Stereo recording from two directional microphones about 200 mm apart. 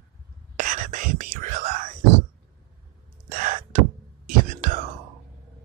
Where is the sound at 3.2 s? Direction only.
40° right (ahead or behind).